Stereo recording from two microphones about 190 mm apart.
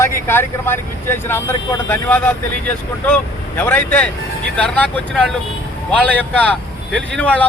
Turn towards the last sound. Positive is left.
turn(degrees=5)  # may be behind; listen again after turning